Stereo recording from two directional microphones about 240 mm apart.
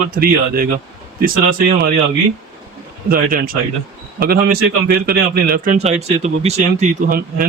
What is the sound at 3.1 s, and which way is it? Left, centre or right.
A man's voice, right.